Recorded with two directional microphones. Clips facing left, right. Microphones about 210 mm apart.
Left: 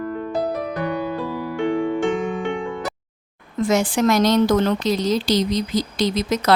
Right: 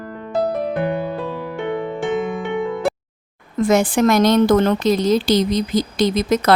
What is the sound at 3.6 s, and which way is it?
A woman's voice, 55° right (ahead or behind).